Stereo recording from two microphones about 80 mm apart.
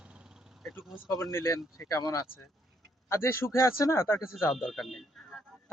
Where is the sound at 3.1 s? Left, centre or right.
Left.